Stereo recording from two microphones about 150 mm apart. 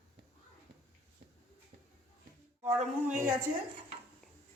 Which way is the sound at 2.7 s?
55° right (ahead or behind).